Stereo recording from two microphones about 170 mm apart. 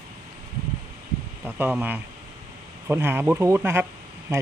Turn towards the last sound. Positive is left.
turn(degrees=-15)  # may be behind; listen again after turning